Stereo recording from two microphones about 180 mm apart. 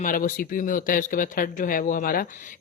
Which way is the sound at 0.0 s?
50° left (ahead or behind).